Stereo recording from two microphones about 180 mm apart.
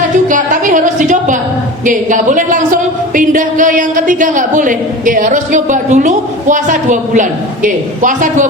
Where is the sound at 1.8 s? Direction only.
45° right (ahead or behind).